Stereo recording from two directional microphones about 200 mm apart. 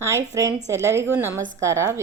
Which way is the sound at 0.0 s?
15° right (ahead or behind).